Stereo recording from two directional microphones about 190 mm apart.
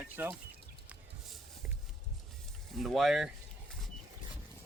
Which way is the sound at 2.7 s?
Centre (ahead or behind).